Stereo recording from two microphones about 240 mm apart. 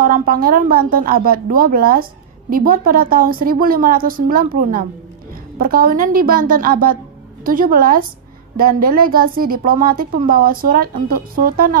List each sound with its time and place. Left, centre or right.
0.0 s a woman's voice: right